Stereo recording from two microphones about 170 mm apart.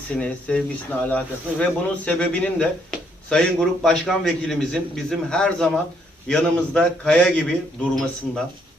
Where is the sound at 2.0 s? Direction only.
5° left (ahead or behind).